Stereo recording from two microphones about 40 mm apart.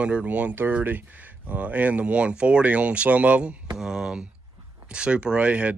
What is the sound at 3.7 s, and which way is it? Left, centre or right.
Speech, centre.